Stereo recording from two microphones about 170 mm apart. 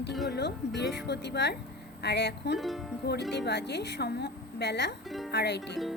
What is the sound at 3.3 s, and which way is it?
Speech, 80° left.